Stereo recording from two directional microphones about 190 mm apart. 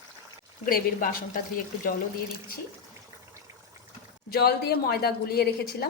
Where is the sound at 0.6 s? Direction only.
45° left (ahead or behind).